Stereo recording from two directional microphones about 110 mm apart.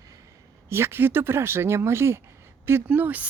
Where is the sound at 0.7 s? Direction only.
20° right (ahead or behind).